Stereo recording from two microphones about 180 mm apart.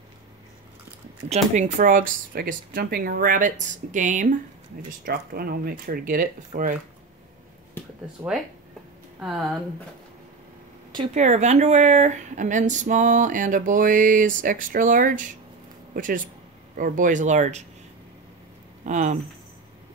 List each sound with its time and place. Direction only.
1.3 s speech: 40° right (ahead or behind)
5.0 s speech: 55° right (ahead or behind)
8.2 s speech: 5° right (ahead or behind)
11.1 s speech: 40° right (ahead or behind)
18.9 s speech: 40° right (ahead or behind)